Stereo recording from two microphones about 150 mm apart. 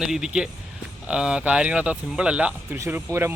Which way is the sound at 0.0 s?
5° right (ahead or behind).